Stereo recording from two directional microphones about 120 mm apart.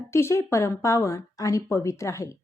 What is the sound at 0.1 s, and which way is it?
A woman's voice, 20° left (ahead or behind).